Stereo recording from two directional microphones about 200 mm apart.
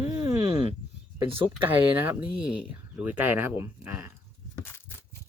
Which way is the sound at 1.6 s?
10° right (ahead or behind).